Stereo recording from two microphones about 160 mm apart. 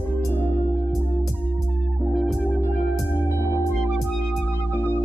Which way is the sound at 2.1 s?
Centre (ahead or behind).